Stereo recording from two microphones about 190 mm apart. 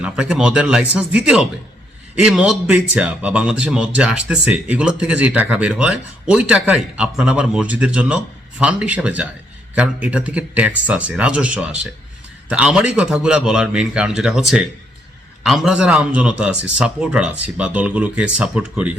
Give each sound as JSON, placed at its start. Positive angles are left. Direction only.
{"t": 0.0, "sound": "speech", "side_deg": -5}